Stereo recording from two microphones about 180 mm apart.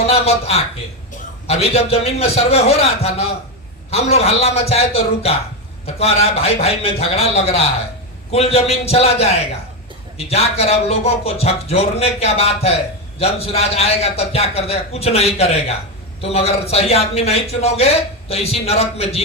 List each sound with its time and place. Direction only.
0.1 s a man's voice: 35° left (ahead or behind)